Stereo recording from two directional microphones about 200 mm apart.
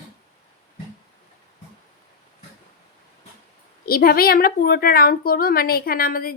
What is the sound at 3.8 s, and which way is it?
A woman's voice, 50° left (ahead or behind).